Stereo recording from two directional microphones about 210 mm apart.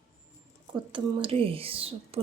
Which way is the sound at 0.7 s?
20° right (ahead or behind).